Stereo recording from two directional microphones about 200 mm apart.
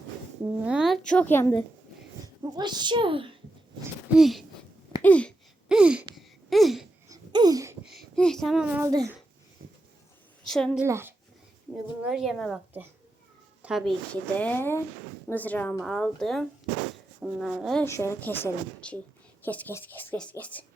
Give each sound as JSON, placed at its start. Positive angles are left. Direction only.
{"t": 0.6, "sound": "a woman's voice", "side_deg": -5}
{"t": 2.2, "sound": "speech", "side_deg": -20}
{"t": 4.1, "sound": "a woman's voice", "side_deg": 0}
{"t": 5.6, "sound": "a sound", "side_deg": -5}
{"t": 7.1, "sound": "a sound", "side_deg": -20}
{"t": 7.9, "sound": "a child's voice", "side_deg": 0}
{"t": 8.9, "sound": "a child's voice", "side_deg": -20}
{"t": 10.4, "sound": "a woman's voice", "side_deg": 5}
{"t": 10.8, "sound": "a child's voice", "side_deg": -15}
{"t": 12.0, "sound": "a woman's voice", "side_deg": 0}
{"t": 17.8, "sound": "speech", "side_deg": 15}